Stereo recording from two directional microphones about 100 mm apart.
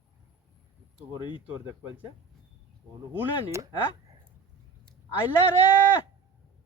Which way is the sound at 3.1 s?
25° right (ahead or behind).